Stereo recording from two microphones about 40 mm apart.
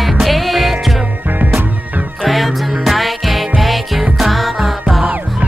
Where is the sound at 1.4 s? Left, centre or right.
Right.